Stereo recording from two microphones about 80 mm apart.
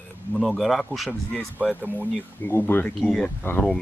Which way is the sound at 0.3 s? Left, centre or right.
Centre.